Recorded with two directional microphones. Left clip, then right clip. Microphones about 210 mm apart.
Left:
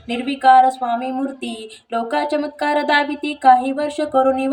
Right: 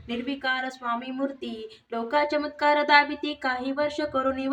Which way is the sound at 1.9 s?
25° right (ahead or behind).